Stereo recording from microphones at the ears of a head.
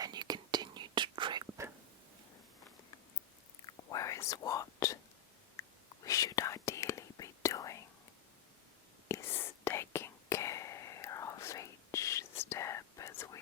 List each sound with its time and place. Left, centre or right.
0.0 s whispering: right
3.6 s whispering: left
9.0 s whispering: left